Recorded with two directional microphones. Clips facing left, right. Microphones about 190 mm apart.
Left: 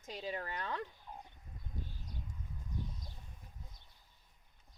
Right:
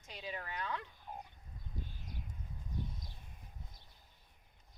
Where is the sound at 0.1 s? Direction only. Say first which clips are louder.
Left 4 dB; 40° left (ahead or behind).